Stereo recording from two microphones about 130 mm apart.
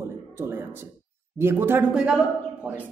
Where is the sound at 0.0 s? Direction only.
20° right (ahead or behind).